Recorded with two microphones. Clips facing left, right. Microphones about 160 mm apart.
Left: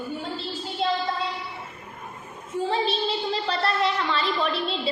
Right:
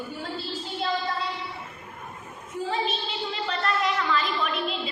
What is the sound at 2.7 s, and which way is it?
A woman's voice, 35° left (ahead or behind).